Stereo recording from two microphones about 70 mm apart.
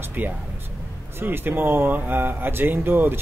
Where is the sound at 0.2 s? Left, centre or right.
Right.